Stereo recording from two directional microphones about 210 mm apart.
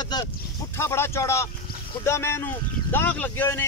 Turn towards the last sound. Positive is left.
turn(degrees=10)  # may be behind; listen again after turning